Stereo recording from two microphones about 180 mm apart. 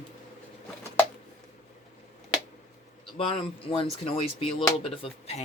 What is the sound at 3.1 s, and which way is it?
Speech, 30° left (ahead or behind).